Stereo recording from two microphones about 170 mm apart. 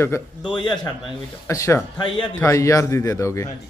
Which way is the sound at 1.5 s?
20° left (ahead or behind).